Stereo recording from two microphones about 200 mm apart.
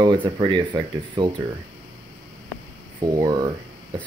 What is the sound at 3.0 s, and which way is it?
Speech, 20° right (ahead or behind).